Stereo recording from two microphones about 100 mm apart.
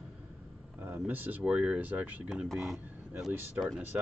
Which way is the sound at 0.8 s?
20° right (ahead or behind).